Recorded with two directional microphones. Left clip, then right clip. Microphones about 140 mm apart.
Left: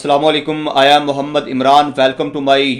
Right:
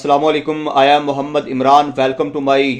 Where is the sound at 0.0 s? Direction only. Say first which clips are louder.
Left 1 dB; 30° right (ahead or behind).